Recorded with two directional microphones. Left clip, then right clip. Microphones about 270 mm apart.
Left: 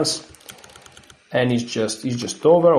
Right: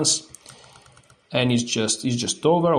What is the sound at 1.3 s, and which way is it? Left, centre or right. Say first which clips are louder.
Speech: left 2 dB; right.